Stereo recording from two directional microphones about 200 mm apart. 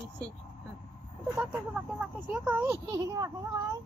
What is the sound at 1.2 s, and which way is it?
Speech, 5° right (ahead or behind).